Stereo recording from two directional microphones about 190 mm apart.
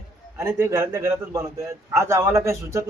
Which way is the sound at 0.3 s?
15° right (ahead or behind).